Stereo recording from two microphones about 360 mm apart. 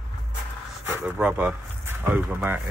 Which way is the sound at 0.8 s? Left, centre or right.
Centre.